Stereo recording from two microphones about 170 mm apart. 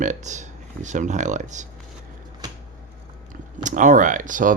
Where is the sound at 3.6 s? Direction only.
50° right (ahead or behind).